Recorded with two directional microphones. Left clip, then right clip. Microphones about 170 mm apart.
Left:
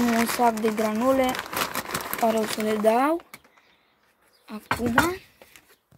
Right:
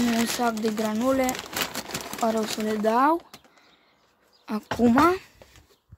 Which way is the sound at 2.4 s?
20° left (ahead or behind).